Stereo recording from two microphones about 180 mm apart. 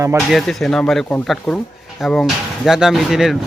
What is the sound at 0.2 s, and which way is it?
Speech, centre (ahead or behind).